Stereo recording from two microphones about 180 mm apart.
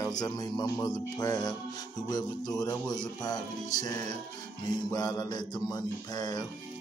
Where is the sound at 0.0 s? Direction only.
20° left (ahead or behind).